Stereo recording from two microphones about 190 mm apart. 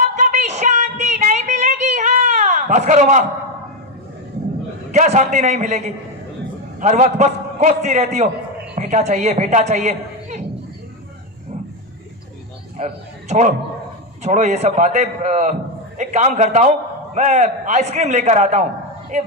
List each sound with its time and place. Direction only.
0.0 s a sound: 40° right (ahead or behind)
4.9 s a man's voice: 40° right (ahead or behind)
12.8 s a man's voice: 35° right (ahead or behind)